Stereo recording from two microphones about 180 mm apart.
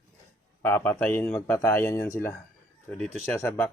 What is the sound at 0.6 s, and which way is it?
Speech, 10° left (ahead or behind).